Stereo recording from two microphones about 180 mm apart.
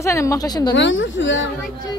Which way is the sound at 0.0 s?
15° left (ahead or behind).